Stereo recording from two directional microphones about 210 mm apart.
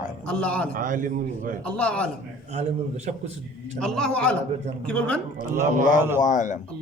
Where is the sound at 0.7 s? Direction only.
40° right (ahead or behind).